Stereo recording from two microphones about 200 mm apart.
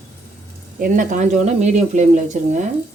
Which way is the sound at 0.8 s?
40° right (ahead or behind).